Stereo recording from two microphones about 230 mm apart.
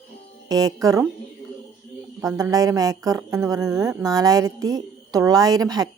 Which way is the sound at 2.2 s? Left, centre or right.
Centre.